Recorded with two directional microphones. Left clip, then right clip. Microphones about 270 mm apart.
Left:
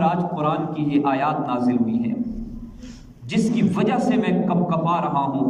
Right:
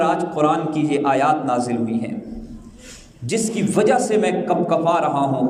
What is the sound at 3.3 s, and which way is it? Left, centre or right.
A man's voice, right.